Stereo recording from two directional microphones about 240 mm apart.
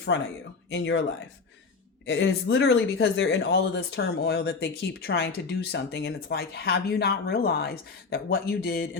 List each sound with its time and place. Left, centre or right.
0.1 s speech: left
2.0 s speech: left